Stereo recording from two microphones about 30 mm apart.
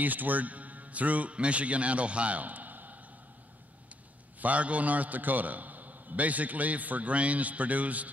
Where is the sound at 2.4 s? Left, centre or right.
Right.